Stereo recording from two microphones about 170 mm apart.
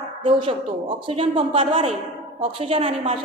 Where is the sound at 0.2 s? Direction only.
30° right (ahead or behind).